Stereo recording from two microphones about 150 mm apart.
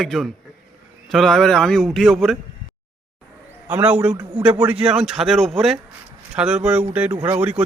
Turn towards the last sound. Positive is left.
turn(degrees=-15)  # may be behind; listen again after turning